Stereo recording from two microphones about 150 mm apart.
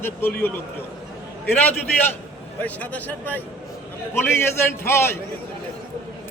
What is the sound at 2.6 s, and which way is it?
A man's voice, 10° left (ahead or behind).